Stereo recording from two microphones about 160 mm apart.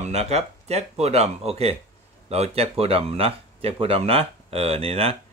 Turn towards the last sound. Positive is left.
turn(degrees=-40)  # may be behind; listen again after turning